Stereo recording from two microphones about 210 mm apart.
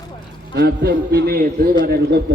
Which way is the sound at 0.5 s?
50° right (ahead or behind).